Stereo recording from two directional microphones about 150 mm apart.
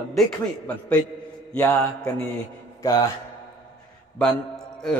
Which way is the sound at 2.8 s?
25° left (ahead or behind).